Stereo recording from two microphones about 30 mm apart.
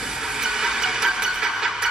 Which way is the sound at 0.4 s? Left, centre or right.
Right.